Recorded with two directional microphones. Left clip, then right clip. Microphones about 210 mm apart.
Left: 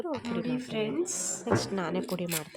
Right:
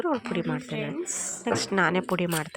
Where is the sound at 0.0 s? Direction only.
15° right (ahead or behind).